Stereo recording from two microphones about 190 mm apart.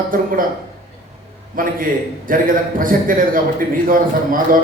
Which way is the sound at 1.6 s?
45° right (ahead or behind).